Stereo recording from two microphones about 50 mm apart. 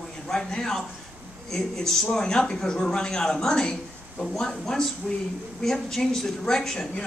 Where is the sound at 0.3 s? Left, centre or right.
Centre.